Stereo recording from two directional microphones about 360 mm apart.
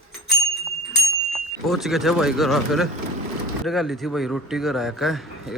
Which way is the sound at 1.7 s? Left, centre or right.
Centre.